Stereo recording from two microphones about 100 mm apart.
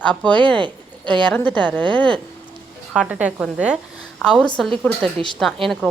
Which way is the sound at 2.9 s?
10° right (ahead or behind).